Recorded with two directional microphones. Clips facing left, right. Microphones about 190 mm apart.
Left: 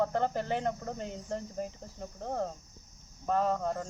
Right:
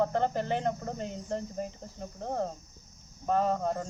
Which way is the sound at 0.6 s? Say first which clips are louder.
Right 2 dB; 25° right (ahead or behind).